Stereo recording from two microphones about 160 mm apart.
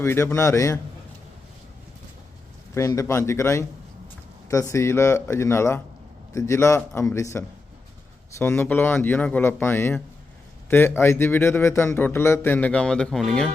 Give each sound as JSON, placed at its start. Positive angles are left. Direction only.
{"t": 0.0, "sound": "a man's voice", "side_deg": 15}
{"t": 2.7, "sound": "a man's voice", "side_deg": 20}